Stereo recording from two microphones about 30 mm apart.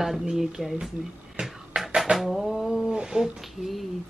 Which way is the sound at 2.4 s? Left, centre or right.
Centre.